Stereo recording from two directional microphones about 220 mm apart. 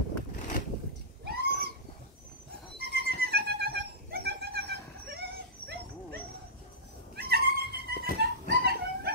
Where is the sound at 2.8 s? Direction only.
45° right (ahead or behind).